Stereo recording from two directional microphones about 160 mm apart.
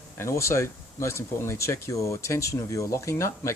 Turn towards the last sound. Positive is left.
turn(degrees=15)  # may be behind; listen again after turning